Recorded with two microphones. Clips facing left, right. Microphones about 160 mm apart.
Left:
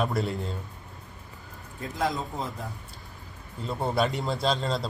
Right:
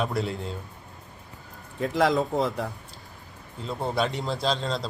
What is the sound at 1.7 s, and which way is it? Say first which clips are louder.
Speech: right 7 dB; 85° right.